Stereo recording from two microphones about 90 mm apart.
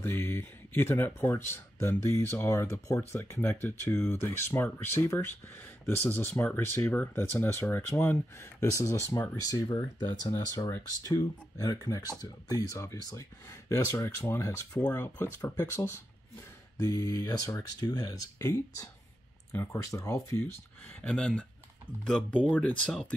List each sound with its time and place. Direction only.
0.0 s speech: 25° left (ahead or behind)
9.4 s speech: 40° left (ahead or behind)
14.7 s speech: 40° left (ahead or behind)
21.0 s speech: 10° left (ahead or behind)
22.5 s speech: 15° left (ahead or behind)